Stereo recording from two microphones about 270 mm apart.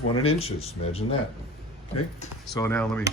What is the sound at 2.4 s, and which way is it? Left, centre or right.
Speech, centre.